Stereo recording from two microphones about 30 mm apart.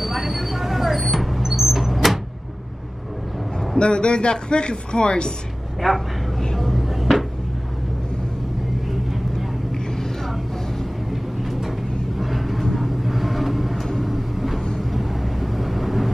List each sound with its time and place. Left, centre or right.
0.0 s vehicle: centre
3.7 s speech: left
5.8 s speech: centre
6.6 s a sound: centre
12.2 s vehicle: centre